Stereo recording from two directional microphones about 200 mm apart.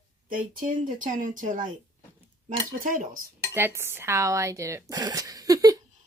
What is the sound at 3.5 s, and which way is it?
Speech, 10° right (ahead or behind).